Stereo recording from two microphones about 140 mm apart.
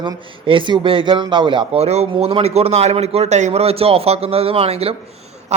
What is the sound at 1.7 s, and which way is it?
A man's voice, 50° right (ahead or behind).